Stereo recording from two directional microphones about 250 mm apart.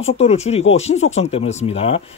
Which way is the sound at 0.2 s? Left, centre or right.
Left.